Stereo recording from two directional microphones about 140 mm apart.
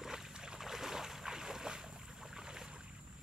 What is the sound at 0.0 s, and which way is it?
Boat, 5° right (ahead or behind).